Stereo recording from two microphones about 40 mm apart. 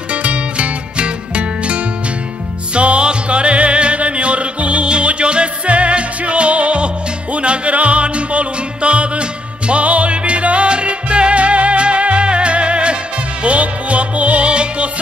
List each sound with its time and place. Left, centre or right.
0.1 s music: right